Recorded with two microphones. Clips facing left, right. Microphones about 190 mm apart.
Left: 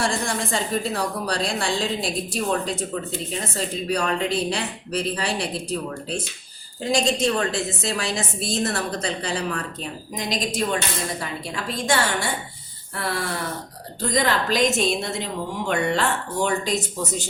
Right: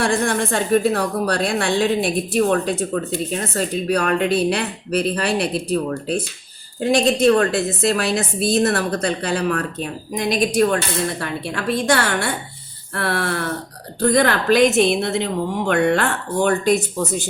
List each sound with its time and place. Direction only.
0.0 s a woman's voice: 60° right (ahead or behind)
6.7 s a woman's voice: 60° right (ahead or behind)